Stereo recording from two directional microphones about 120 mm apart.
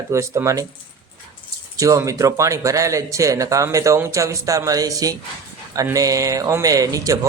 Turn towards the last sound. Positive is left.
turn(degrees=-30)  # may be behind; listen again after turning